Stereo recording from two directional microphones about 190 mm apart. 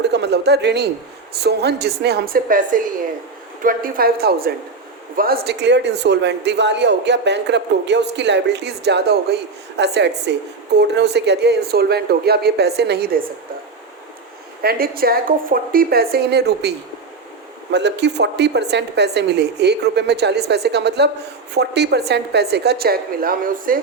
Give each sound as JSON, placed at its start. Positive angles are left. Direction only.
{"t": 0.0, "sound": "a woman's voice", "side_deg": -65}
{"t": 14.6, "sound": "a woman's voice", "side_deg": -50}